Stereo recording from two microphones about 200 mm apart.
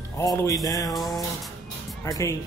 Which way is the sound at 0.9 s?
Centre (ahead or behind).